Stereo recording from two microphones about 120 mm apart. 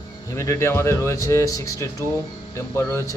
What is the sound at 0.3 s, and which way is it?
Speech, 25° left (ahead or behind).